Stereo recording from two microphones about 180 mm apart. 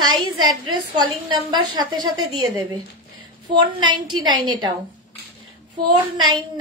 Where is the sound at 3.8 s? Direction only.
25° right (ahead or behind).